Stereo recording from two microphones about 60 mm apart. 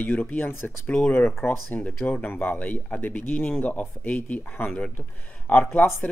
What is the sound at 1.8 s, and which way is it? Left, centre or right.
Speech, centre.